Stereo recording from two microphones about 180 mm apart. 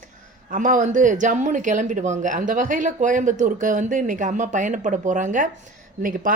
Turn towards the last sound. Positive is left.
turn(degrees=-50)  # may be behind; listen again after turning